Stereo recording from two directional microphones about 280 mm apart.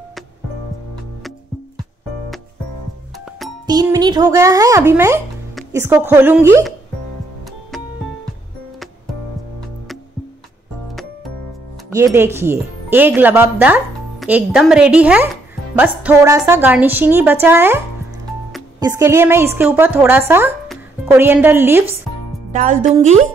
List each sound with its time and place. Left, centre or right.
3.6 s speech: centre
11.9 s speech: centre
22.5 s speech: right